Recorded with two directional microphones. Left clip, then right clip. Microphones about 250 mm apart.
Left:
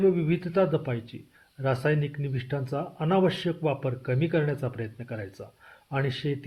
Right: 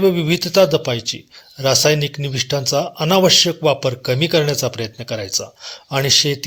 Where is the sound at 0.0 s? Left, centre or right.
Right.